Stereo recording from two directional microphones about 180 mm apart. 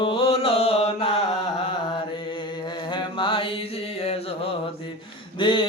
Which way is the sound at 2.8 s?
25° left (ahead or behind).